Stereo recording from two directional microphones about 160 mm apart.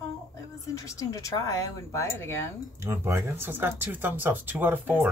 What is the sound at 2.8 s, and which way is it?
Speech, 15° right (ahead or behind).